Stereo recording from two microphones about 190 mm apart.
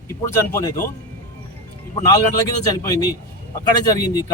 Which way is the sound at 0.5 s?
15° left (ahead or behind).